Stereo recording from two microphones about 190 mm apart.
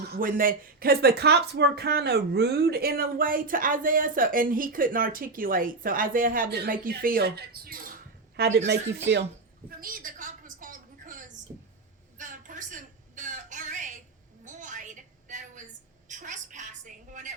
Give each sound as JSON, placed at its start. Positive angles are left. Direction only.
{"t": 0.0, "sound": "speech", "side_deg": -50}
{"t": 8.4, "sound": "speech", "side_deg": -65}
{"t": 9.6, "sound": "a sound", "side_deg": -50}